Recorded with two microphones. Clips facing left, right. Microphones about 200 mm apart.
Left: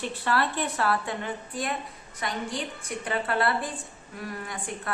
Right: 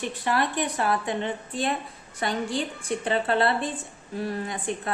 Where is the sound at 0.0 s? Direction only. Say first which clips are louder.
Right 1 dB; 15° right (ahead or behind).